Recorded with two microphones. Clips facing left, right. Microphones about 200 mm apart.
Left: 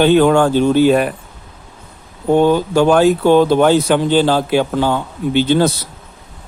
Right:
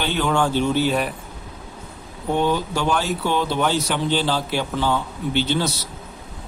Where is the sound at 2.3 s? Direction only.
50° left (ahead or behind).